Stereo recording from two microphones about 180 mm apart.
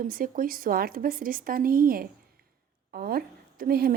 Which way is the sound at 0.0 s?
50° right (ahead or behind).